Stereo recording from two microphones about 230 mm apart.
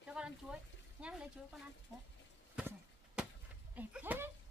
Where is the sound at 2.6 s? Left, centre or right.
Centre.